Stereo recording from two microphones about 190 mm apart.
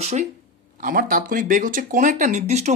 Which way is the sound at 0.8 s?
50° right (ahead or behind).